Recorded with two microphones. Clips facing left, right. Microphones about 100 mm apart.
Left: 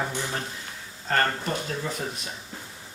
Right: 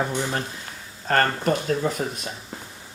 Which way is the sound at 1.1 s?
55° right (ahead or behind).